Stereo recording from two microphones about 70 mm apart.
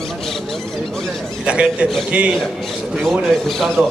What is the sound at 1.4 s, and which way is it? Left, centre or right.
Speech, centre.